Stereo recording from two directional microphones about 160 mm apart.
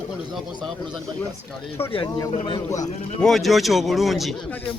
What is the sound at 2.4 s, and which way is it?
Speech, 25° left (ahead or behind).